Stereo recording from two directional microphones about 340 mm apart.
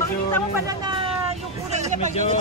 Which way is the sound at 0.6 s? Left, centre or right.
Centre.